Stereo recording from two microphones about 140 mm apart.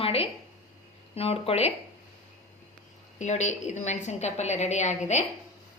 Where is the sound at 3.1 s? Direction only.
55° left (ahead or behind).